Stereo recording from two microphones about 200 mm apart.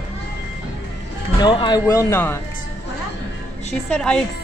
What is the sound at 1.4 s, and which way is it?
Speech, 20° left (ahead or behind).